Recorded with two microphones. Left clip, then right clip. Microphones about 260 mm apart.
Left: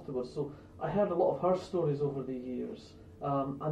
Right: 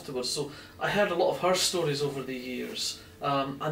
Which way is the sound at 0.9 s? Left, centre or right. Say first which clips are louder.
Right 3 dB; centre.